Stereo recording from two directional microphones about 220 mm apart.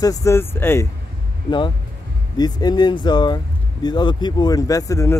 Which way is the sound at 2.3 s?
20° left (ahead or behind).